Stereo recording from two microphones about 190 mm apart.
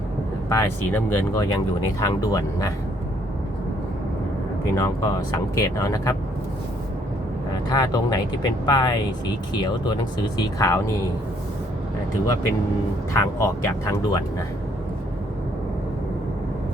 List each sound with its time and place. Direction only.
0.5 s speech: 15° left (ahead or behind)
4.6 s speech: 15° left (ahead or behind)
7.5 s speech: 20° left (ahead or behind)
13.1 s speech: 15° left (ahead or behind)